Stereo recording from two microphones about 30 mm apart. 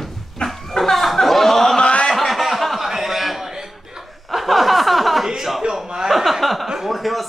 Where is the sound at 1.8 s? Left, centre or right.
Left.